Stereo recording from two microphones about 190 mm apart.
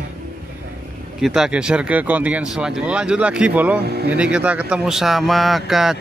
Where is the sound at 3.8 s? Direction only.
55° right (ahead or behind).